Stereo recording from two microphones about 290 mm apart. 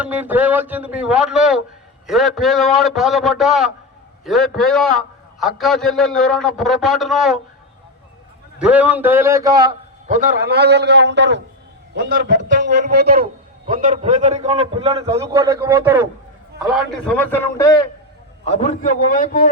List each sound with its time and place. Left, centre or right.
0.0 s a man's voice: centre
8.5 s a man's voice: centre
10.1 s a man's voice: right; by 16.0 s centre
16.7 s a man's voice: centre
18.4 s a man's voice: left